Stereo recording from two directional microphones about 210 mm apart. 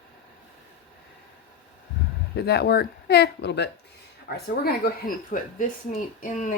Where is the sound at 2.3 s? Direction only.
50° left (ahead or behind).